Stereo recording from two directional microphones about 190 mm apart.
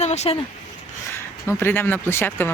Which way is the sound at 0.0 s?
35° left (ahead or behind).